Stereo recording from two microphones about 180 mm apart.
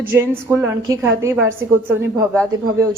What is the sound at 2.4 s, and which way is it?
Speech, 15° right (ahead or behind).